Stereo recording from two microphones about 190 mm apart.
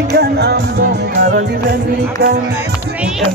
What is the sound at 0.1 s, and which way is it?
Music, 60° right (ahead or behind).